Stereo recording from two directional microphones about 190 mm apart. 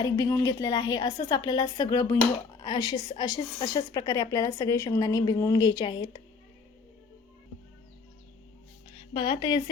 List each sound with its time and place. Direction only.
0.0 s a woman's voice: 15° left (ahead or behind)
9.1 s a woman's voice: 20° left (ahead or behind)